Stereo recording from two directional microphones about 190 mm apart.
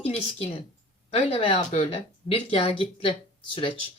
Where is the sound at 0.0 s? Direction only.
30° left (ahead or behind).